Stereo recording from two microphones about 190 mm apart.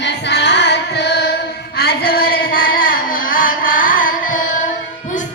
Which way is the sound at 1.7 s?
55° left (ahead or behind).